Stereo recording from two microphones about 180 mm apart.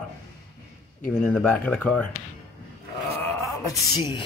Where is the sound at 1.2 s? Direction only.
10° left (ahead or behind).